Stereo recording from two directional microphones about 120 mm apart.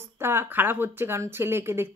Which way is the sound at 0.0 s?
20° right (ahead or behind).